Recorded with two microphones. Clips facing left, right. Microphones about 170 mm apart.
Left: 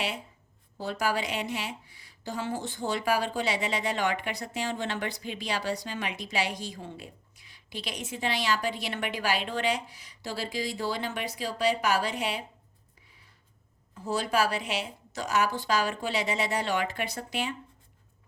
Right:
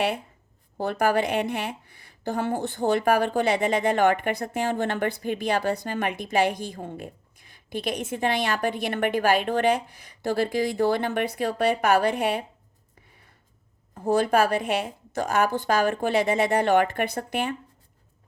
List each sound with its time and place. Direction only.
0.8 s a woman's voice: 55° right (ahead or behind)
13.1 s a sound: 55° right (ahead or behind)
13.9 s a woman's voice: 55° right (ahead or behind)